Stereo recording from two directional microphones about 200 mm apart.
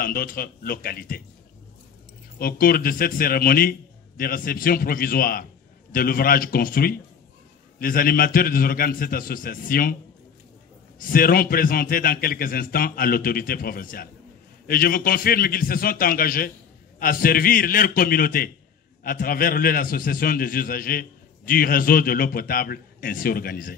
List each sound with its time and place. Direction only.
0.0 s a man's voice: 45° left (ahead or behind)
2.3 s a man's voice: 45° left (ahead or behind)
11.0 s a man's voice: 45° left (ahead or behind)